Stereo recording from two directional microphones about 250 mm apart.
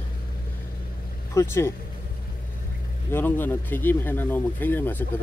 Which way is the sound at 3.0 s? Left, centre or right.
Centre.